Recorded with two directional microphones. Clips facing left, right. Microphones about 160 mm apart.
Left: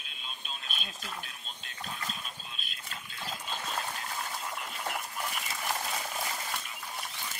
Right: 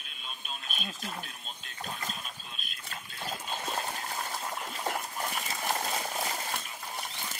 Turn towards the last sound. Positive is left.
turn(degrees=-35)  # may be behind; listen again after turning